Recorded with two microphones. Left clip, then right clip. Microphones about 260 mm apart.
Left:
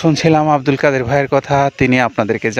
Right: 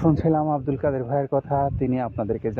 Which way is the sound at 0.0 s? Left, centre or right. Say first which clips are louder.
Left 9 dB; left.